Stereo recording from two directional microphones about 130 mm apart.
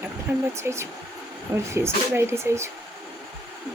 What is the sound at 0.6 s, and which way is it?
Speech, 20° right (ahead or behind).